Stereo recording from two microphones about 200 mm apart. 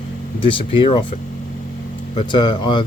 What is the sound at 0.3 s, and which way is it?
Speech, 25° left (ahead or behind).